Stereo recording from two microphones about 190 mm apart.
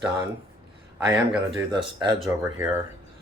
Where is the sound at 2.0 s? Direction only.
25° right (ahead or behind).